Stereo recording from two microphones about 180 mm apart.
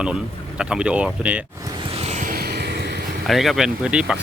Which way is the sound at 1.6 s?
25° right (ahead or behind).